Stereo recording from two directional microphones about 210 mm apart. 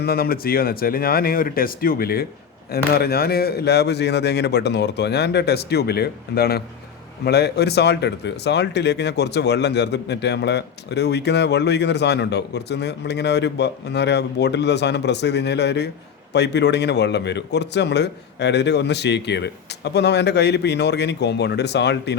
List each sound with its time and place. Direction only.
0.0 s speech: 45° left (ahead or behind)